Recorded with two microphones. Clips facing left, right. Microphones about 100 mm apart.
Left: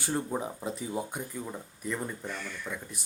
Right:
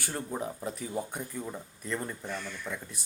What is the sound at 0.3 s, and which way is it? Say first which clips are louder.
Speech: left 1 dB; 15° left (ahead or behind).